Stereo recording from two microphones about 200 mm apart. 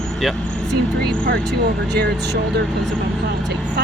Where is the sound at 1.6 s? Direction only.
55° right (ahead or behind).